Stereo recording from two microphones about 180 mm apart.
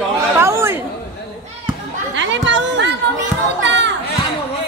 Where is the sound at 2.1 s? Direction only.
90° right.